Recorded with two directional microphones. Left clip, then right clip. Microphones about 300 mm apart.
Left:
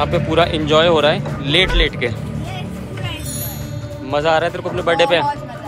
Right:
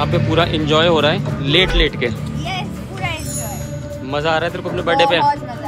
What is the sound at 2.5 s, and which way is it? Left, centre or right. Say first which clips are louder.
Music: right 3 dB; right.